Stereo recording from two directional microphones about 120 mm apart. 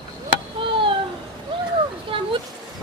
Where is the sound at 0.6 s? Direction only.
45° right (ahead or behind).